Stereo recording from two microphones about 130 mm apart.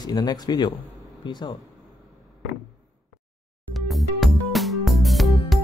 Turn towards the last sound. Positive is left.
turn(degrees=0)  # may be behind; listen again after turning